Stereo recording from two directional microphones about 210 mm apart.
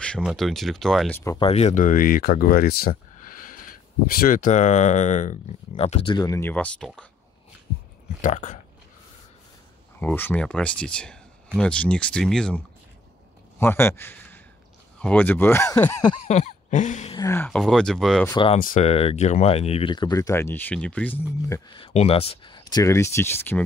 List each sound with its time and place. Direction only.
0.0 s speech: centre (ahead or behind)
1.2 s speech: 15° left (ahead or behind)
1.5 s speech: 35° left (ahead or behind); by 7.1 s 5° left (ahead or behind)
8.2 s speech: 35° left (ahead or behind)
9.9 s speech: 10° left (ahead or behind)
16.3 s a sound: 30° left (ahead or behind)
17.1 s speech: 15° left (ahead or behind)
18.3 s speech: 25° left (ahead or behind)
18.6 s speech: 35° left (ahead or behind); by 21.2 s 5° left (ahead or behind)
21.5 s speech: 20° left (ahead or behind)